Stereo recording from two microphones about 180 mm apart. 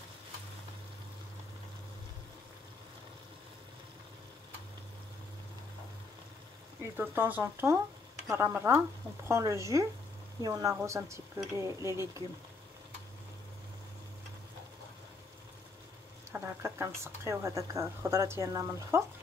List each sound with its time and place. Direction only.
6.8 s speech: 10° right (ahead or behind)
16.3 s a sound: 15° right (ahead or behind)
17.0 s speech: 15° right (ahead or behind)